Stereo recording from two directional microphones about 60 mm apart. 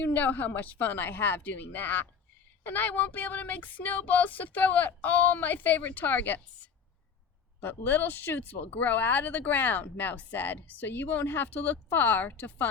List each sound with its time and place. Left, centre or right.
0.0 s speech: left
7.6 s speech: left